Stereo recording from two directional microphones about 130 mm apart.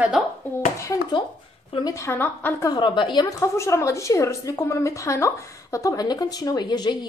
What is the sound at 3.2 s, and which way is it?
A woman's voice, 25° left (ahead or behind).